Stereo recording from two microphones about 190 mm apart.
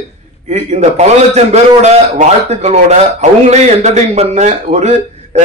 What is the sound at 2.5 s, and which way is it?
Speech, 35° right (ahead or behind).